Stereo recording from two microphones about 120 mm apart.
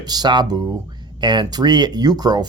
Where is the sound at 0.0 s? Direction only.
35° right (ahead or behind).